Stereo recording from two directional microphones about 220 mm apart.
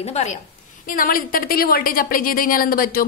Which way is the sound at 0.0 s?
30° left (ahead or behind).